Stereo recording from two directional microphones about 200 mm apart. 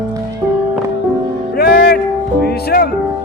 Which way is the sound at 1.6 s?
50° left (ahead or behind).